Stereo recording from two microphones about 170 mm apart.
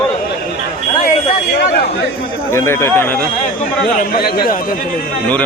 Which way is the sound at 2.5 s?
15° left (ahead or behind).